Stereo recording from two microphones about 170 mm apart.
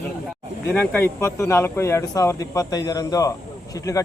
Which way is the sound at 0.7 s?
10° left (ahead or behind).